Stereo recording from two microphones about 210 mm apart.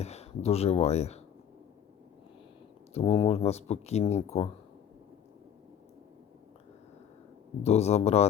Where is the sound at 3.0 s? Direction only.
30° left (ahead or behind).